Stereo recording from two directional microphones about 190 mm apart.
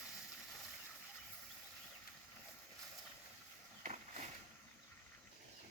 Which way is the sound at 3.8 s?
40° right (ahead or behind).